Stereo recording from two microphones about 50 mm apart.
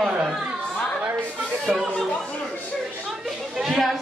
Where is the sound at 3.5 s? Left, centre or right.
Centre.